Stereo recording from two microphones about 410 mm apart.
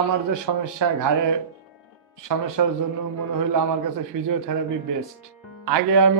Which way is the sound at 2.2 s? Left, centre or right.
Right.